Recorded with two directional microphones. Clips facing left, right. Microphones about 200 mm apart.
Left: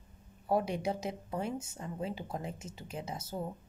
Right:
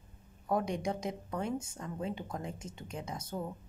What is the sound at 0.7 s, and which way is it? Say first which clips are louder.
Speech: even; 5° left (ahead or behind).